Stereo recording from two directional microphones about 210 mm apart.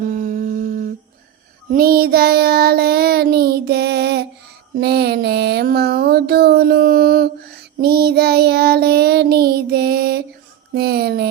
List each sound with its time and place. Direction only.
0.0 s humming: 40° right (ahead or behind)
1.7 s child singing: 45° right (ahead or behind)
4.8 s a sound: 50° right (ahead or behind)
7.8 s child singing: 50° right (ahead or behind)
10.8 s speech: 50° right (ahead or behind)